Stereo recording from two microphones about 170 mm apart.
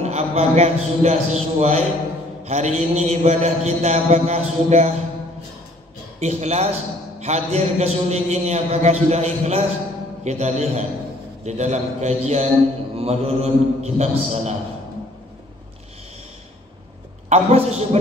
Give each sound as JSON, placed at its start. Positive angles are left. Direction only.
{"t": 0.0, "sound": "a man's voice", "side_deg": -40}
{"t": 6.1, "sound": "a man's voice", "side_deg": -40}
{"t": 17.3, "sound": "a man's voice", "side_deg": -40}